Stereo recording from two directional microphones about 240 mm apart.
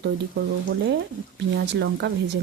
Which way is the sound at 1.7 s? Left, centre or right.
Right.